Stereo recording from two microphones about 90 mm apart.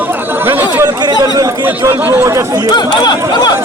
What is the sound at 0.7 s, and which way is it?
Speech, 50° right (ahead or behind).